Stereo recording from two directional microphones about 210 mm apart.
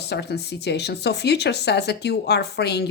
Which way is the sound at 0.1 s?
50° left (ahead or behind).